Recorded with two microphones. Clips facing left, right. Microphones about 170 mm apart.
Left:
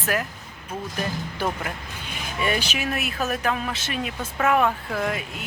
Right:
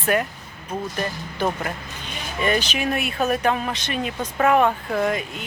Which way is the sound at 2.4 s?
10° left (ahead or behind).